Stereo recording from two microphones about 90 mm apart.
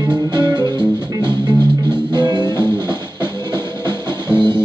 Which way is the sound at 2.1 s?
55° right (ahead or behind).